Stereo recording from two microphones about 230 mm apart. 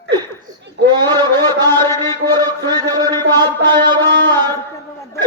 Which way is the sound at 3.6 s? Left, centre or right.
Centre.